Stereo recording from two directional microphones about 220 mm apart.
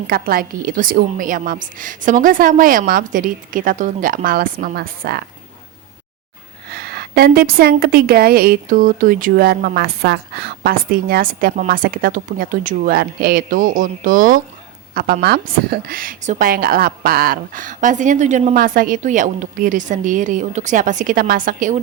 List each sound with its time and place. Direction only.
0.1 s a woman's voice: 40° right (ahead or behind)
6.7 s a woman's voice: 45° right (ahead or behind)